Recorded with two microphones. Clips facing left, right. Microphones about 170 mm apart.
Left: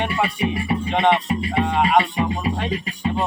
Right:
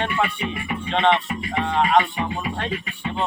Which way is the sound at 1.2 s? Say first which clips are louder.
Left 5 dB; 35° left (ahead or behind).